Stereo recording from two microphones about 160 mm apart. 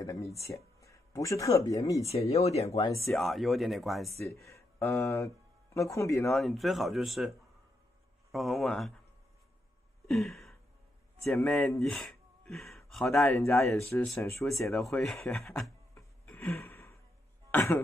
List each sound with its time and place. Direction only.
0.7 s speech: 20° left (ahead or behind)
2.0 s speech: 40° left (ahead or behind)
3.2 s speech: centre (ahead or behind)
4.5 s speech: 15° left (ahead or behind)
6.2 s speech: centre (ahead or behind)
10.0 s a sound: centre (ahead or behind)
11.3 s speech: centre (ahead or behind)
13.3 s speech: 20° left (ahead or behind)
14.9 s speech: 5° left (ahead or behind)
16.3 s a sound: 10° left (ahead or behind)
17.5 s speech: 10° left (ahead or behind)